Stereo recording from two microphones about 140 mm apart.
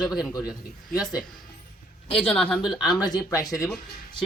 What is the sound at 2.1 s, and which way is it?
A man's voice, 5° left (ahead or behind).